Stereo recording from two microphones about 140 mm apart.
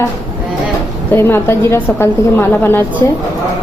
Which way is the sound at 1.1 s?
20° left (ahead or behind).